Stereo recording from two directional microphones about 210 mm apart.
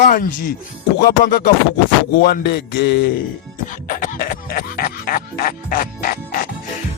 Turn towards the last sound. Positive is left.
turn(degrees=45)  # may be behind; listen again after turning